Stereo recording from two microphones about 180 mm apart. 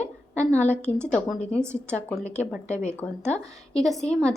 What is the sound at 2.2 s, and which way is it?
Speech, 15° right (ahead or behind).